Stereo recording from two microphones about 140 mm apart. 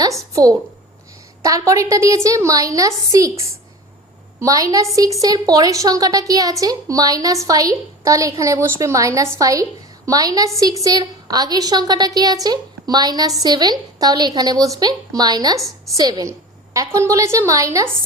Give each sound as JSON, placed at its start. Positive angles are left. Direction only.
{"t": 0.3, "sound": "a woman's voice", "side_deg": -25}